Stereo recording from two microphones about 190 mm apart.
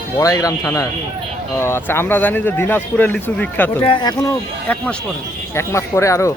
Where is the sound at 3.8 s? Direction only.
25° left (ahead or behind).